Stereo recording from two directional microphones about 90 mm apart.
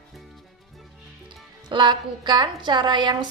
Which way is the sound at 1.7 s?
60° right (ahead or behind).